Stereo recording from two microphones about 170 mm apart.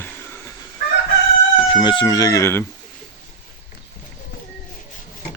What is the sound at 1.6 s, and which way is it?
Speech, 30° left (ahead or behind).